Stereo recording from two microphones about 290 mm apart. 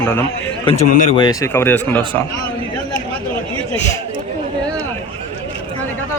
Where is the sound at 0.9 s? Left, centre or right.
Left.